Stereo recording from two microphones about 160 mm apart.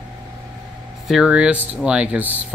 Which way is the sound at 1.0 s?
5° right (ahead or behind).